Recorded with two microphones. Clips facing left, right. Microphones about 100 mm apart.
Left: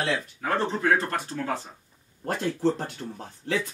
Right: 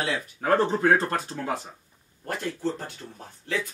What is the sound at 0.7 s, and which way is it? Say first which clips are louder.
Speech: right 2 dB; 30° right (ahead or behind).